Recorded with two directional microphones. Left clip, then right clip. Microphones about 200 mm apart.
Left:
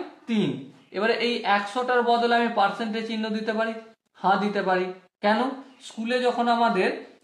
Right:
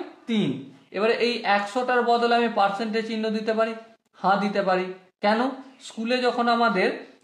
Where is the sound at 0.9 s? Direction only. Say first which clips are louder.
Right 1 dB; 25° right (ahead or behind).